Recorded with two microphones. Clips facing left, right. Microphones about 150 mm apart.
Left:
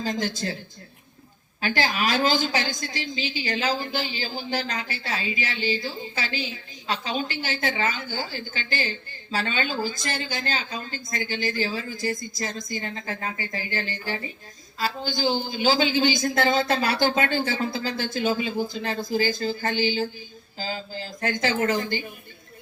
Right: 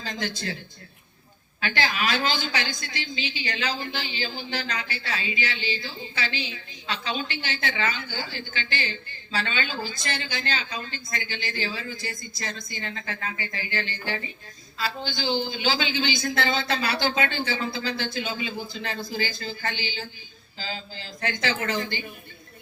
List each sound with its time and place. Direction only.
0.0 s a woman's voice: 40° left (ahead or behind)
1.6 s a woman's voice: 40° left (ahead or behind)